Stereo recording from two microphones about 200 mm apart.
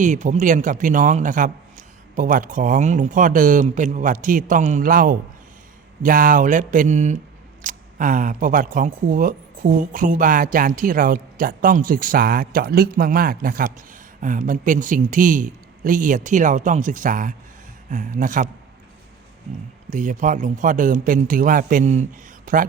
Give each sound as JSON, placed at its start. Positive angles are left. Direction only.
{"t": 0.0, "sound": "a man's voice", "side_deg": -40}
{"t": 19.9, "sound": "a man's voice", "side_deg": -40}